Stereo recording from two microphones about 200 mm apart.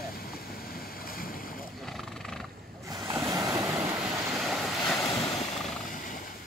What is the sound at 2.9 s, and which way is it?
Waves, 15° right (ahead or behind).